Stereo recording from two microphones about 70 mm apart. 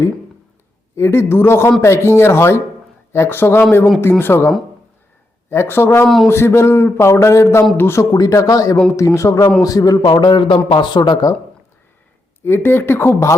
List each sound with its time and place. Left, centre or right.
0.9 s speech: left
8.1 s a man's voice: left
12.5 s speech: left